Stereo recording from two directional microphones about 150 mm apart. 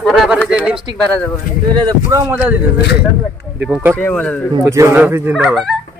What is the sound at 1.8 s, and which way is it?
Speech, 25° right (ahead or behind).